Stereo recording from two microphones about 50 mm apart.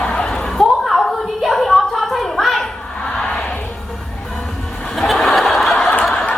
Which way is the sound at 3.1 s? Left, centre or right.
Left.